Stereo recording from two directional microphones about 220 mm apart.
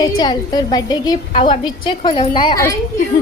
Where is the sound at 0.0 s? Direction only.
20° left (ahead or behind).